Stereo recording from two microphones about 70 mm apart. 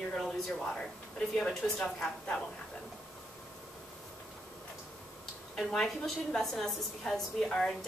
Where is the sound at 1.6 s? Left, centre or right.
Centre.